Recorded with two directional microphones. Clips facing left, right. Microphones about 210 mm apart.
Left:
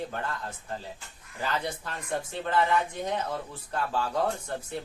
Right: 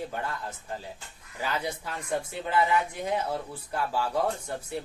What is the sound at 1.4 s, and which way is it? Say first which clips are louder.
A man's voice: even; 10° right (ahead or behind).